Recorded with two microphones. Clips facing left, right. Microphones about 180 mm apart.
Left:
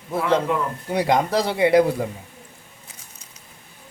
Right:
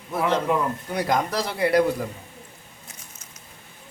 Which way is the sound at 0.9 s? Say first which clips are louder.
Left 6 dB; 25° left (ahead or behind).